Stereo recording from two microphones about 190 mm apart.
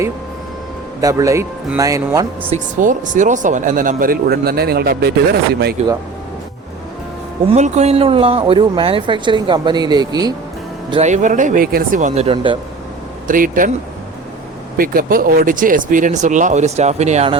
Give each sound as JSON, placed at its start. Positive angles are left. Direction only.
{"t": 1.0, "sound": "speech", "side_deg": -15}
{"t": 2.8, "sound": "speech", "side_deg": -40}
{"t": 7.4, "sound": "speech", "side_deg": -35}
{"t": 10.9, "sound": "speech", "side_deg": -40}
{"t": 13.2, "sound": "speech", "side_deg": -45}
{"t": 14.8, "sound": "speech", "side_deg": -50}